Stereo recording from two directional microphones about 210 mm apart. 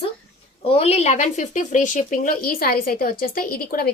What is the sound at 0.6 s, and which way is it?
Speech, 30° left (ahead or behind).